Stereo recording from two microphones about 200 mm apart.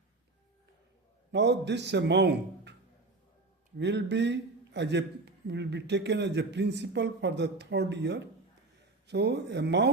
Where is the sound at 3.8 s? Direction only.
60° right (ahead or behind).